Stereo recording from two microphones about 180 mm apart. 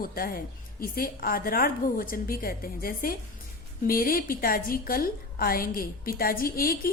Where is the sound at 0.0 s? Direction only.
55° left (ahead or behind).